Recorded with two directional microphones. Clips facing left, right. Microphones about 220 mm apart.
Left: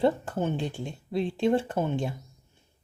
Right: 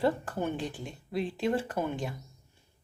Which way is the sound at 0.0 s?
25° left (ahead or behind).